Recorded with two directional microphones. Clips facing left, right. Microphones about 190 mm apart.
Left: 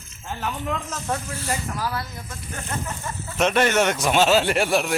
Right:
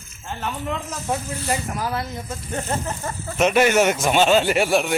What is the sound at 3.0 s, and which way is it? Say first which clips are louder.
Speech: right 3 dB; 40° right (ahead or behind).